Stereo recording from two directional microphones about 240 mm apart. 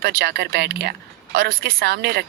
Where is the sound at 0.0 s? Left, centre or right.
Right.